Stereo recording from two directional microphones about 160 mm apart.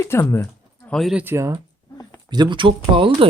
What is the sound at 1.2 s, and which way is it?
Speech, 15° right (ahead or behind).